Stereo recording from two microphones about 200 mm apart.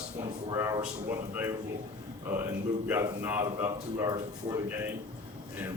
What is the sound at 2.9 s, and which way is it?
A man's voice, 10° right (ahead or behind).